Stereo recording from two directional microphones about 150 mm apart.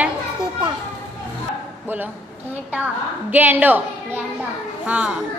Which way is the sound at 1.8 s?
10° right (ahead or behind).